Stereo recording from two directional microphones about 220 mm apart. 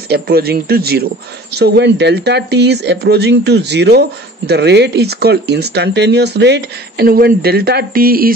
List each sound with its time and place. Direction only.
0.1 s speech: 45° right (ahead or behind)